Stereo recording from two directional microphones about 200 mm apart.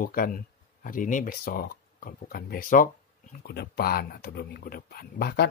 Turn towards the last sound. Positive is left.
turn(degrees=50)  # may be behind; listen again after turning